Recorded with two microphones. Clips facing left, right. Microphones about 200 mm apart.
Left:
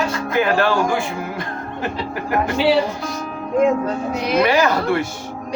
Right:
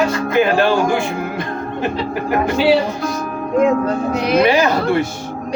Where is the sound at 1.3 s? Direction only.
20° right (ahead or behind).